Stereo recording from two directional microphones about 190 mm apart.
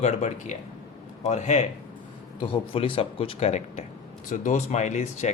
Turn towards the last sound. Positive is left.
turn(degrees=40)  # may be behind; listen again after turning